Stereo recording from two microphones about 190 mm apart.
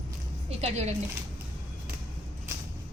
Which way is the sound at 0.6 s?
35° right (ahead or behind).